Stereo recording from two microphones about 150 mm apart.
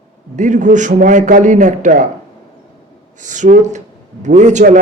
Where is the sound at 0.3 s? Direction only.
55° right (ahead or behind).